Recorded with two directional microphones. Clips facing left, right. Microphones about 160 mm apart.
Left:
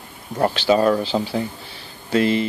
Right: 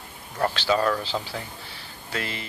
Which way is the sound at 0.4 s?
20° left (ahead or behind).